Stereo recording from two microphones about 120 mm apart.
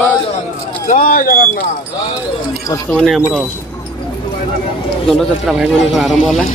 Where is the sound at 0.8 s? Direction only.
90° left.